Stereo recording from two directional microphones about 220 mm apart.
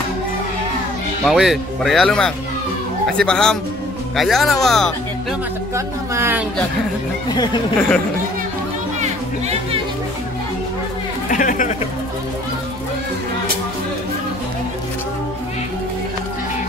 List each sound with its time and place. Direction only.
1.2 s speech: centre (ahead or behind)
5.8 s speech: 10° right (ahead or behind)
7.2 s speech: 20° left (ahead or behind)
9.0 s music: 25° right (ahead or behind)
11.2 s speech: 35° left (ahead or behind)